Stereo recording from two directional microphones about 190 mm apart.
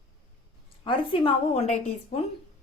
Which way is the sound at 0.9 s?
25° left (ahead or behind).